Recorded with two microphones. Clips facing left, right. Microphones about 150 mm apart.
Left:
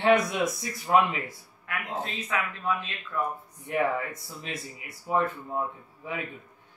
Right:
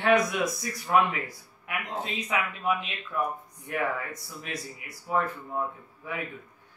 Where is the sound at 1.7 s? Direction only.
15° right (ahead or behind).